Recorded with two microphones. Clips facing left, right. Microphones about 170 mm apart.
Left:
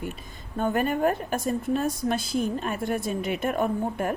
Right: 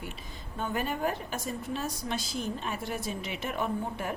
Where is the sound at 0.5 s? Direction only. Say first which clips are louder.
Left 7 dB; 50° left (ahead or behind).